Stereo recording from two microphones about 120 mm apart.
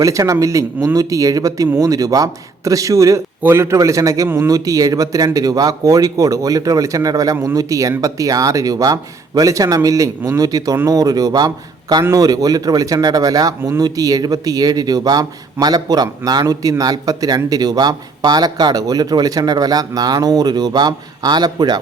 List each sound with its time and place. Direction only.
0.0 s speech: 25° right (ahead or behind)